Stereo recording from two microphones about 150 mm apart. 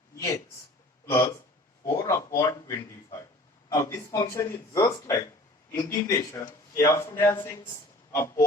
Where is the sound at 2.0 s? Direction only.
20° left (ahead or behind).